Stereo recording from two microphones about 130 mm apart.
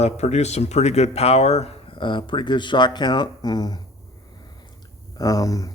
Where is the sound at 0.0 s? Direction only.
55° left (ahead or behind); by 3.8 s 30° left (ahead or behind).